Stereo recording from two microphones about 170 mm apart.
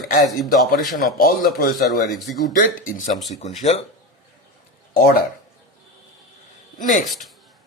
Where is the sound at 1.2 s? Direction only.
60° left (ahead or behind).